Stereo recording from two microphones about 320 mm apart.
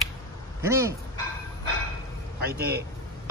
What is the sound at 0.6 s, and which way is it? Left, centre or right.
Speech, centre.